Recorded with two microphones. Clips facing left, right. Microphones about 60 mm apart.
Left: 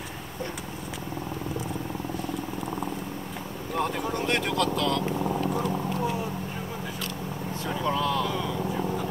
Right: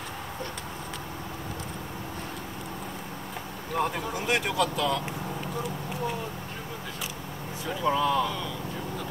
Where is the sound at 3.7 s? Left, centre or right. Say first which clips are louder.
Left 1 dB; centre.